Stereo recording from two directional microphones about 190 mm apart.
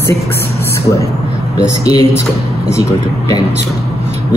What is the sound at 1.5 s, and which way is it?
A man's voice, 20° left (ahead or behind).